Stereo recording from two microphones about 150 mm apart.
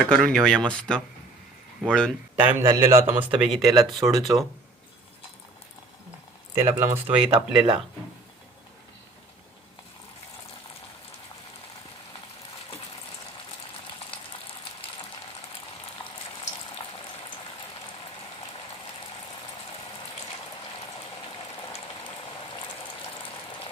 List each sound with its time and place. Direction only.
0.0 s speech: 5° left (ahead or behind)
2.3 s speech: 10° right (ahead or behind)
6.5 s speech: 20° right (ahead or behind)
13.8 s frying: 35° left (ahead or behind)